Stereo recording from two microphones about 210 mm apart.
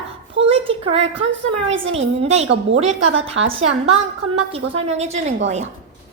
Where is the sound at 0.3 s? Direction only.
25° right (ahead or behind).